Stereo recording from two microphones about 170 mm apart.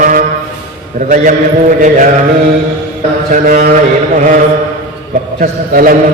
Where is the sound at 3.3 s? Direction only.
50° right (ahead or behind).